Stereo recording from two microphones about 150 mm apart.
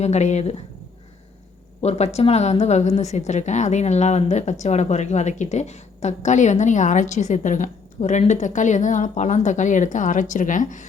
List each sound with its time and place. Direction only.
0.0 s a woman's voice: 50° left (ahead or behind)
1.8 s a woman's voice: 45° left (ahead or behind)